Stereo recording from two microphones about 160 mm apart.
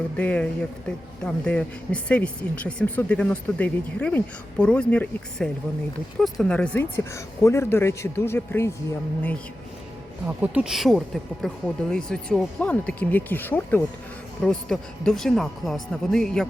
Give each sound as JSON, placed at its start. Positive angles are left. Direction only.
{"t": 0.2, "sound": "speech", "side_deg": 5}
{"t": 10.2, "sound": "speech", "side_deg": -10}